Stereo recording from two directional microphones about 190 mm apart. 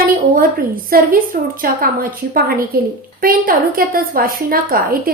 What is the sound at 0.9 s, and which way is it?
A woman's voice, 50° right (ahead or behind).